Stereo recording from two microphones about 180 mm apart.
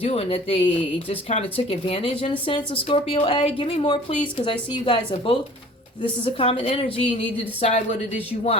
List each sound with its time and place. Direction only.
0.0 s a woman's voice: 35° left (ahead or behind)